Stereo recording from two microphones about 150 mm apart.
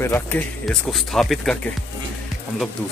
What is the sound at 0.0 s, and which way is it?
Speech, 15° left (ahead or behind).